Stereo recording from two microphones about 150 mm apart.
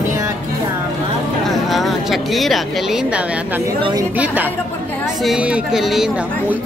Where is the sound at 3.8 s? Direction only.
30° right (ahead or behind).